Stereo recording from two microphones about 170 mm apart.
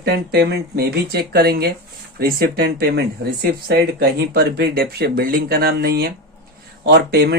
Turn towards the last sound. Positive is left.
turn(degrees=-65)  # may be behind; listen again after turning